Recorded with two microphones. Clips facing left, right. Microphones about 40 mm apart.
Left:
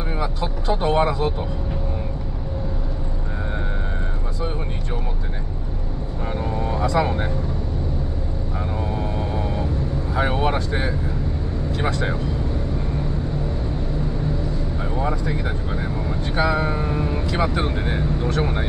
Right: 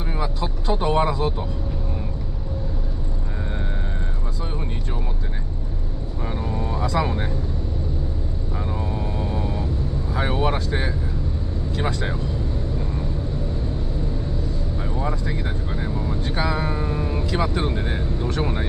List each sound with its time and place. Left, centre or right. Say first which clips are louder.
0.2 s speech: left 1 dB; centre
6.6 s vehicle: left 3 dB; centre
10.1 s vehicle: left 2 dB; centre
10.5 s speech: left 1 dB; centre
16.3 s a sound: left 4 dB; centre